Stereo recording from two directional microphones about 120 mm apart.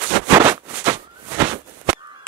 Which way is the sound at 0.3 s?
15° right (ahead or behind).